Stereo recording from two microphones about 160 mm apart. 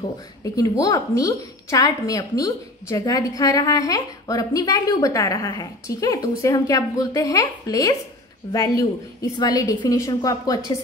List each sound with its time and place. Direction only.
0.4 s a woman's voice: 20° left (ahead or behind)